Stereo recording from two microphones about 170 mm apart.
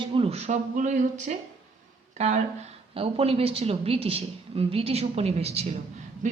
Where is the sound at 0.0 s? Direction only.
30° right (ahead or behind).